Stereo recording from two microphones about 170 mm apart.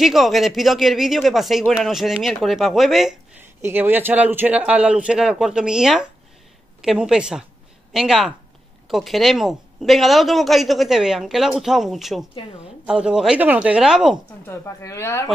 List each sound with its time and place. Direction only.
0.0 s speech: centre (ahead or behind)
3.6 s a man's voice: 10° right (ahead or behind)
14.4 s a woman's voice: 15° left (ahead or behind)